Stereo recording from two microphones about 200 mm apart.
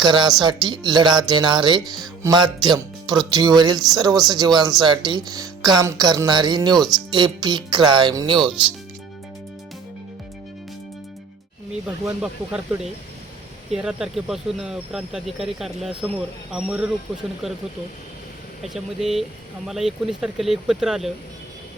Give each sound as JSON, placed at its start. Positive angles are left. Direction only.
{"t": 0.0, "sound": "speech", "side_deg": -20}
{"t": 6.7, "sound": "speech", "side_deg": 0}
{"t": 7.1, "sound": "speech", "side_deg": -20}
{"t": 11.7, "sound": "speech", "side_deg": -5}
{"t": 13.7, "sound": "speech", "side_deg": -5}
{"t": 18.6, "sound": "speech", "side_deg": 0}